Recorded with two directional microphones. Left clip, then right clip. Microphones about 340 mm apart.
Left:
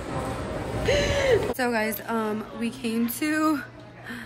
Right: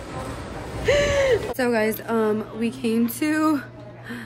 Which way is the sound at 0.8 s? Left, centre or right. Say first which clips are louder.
Right 5 dB; centre.